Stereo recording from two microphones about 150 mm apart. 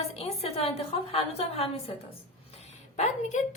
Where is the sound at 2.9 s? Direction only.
55° left (ahead or behind).